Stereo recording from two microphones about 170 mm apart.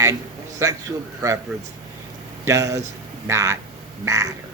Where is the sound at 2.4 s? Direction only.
20° right (ahead or behind).